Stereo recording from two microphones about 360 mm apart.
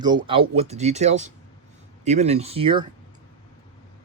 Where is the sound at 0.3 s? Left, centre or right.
Centre.